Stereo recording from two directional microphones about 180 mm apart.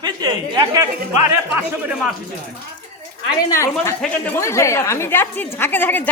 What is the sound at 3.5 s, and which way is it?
A woman's voice, 15° left (ahead or behind).